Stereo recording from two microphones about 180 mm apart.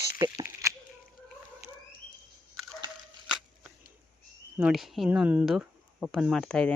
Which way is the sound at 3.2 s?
5° right (ahead or behind).